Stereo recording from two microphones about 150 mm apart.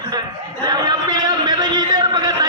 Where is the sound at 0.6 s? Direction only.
30° right (ahead or behind).